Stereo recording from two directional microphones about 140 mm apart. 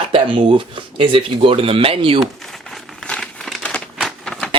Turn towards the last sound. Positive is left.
turn(degrees=5)  # may be behind; listen again after turning